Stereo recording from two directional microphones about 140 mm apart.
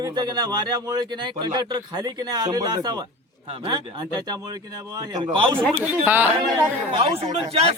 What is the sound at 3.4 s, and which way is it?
Speech, 40° right (ahead or behind).